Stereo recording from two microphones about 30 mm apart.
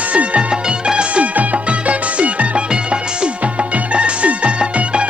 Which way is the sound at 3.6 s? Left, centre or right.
Right.